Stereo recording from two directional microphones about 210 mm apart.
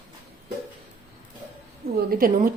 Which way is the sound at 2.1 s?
45° right (ahead or behind).